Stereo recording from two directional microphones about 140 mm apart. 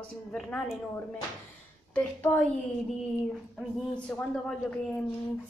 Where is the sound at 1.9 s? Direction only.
15° left (ahead or behind).